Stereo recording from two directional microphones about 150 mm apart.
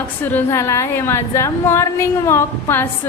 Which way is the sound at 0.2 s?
10° left (ahead or behind).